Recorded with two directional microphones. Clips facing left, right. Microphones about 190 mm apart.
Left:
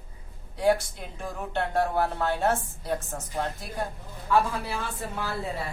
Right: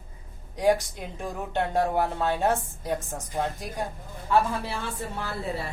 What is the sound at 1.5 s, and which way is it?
Speech, 15° right (ahead or behind).